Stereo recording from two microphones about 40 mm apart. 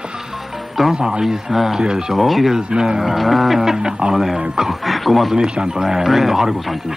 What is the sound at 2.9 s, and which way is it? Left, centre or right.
Speech, centre.